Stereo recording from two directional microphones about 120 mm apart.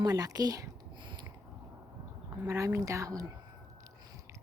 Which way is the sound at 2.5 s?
25° right (ahead or behind).